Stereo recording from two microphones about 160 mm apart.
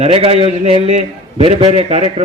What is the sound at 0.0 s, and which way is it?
A man's voice, 40° right (ahead or behind).